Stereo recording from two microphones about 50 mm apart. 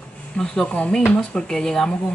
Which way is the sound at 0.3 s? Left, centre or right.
Left.